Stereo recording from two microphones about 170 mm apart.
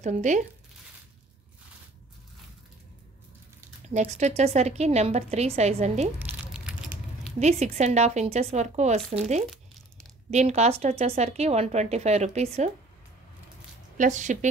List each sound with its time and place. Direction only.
0.0 s speech: 45° right (ahead or behind)
3.9 s speech: 45° right (ahead or behind)
6.1 s crumpling: 10° right (ahead or behind)
7.3 s speech: 40° right (ahead or behind)
10.3 s speech: 40° right (ahead or behind)
13.9 s speech: 45° right (ahead or behind)